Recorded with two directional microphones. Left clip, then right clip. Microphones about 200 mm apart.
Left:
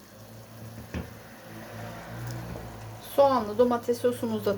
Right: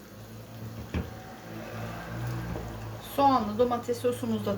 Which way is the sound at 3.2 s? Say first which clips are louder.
Left 2 dB; 40° left (ahead or behind).